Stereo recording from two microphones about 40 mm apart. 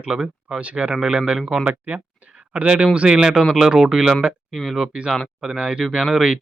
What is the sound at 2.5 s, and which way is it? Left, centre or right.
Speech, right.